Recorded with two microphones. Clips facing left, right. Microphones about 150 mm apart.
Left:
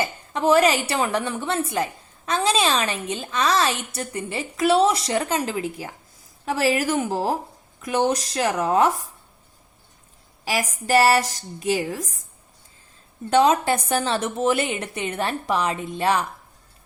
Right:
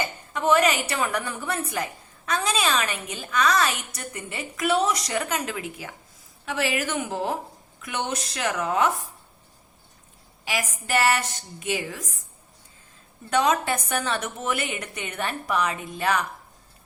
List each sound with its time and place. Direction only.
0.0 s a woman's voice: 30° left (ahead or behind)
10.4 s a woman's voice: 35° left (ahead or behind)
13.3 s a woman's voice: 30° left (ahead or behind)